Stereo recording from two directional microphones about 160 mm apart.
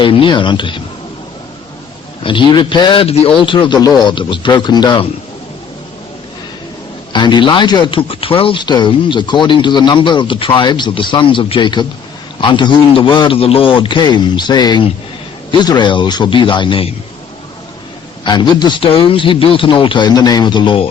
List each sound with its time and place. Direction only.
0.0 s a man's voice: 30° left (ahead or behind)
2.2 s a man's voice: 30° left (ahead or behind)
7.1 s a man's voice: 30° left (ahead or behind)
18.3 s a man's voice: 25° left (ahead or behind)